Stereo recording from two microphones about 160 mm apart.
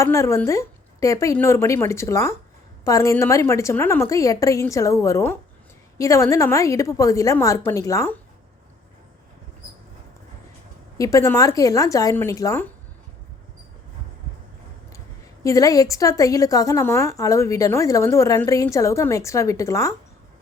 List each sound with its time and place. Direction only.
0.0 s a woman's voice: 20° left (ahead or behind)
10.9 s a woman's voice: 20° left (ahead or behind)
15.4 s a woman's voice: 20° left (ahead or behind)